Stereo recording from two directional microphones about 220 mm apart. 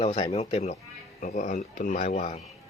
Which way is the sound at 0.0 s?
25° left (ahead or behind).